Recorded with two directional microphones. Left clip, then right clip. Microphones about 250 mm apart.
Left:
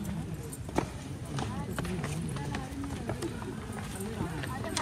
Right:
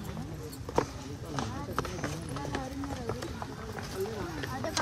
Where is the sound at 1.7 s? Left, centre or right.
Right.